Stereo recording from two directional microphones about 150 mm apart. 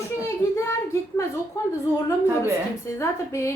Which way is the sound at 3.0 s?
20° left (ahead or behind).